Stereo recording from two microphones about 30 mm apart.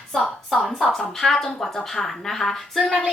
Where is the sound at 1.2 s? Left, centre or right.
Centre.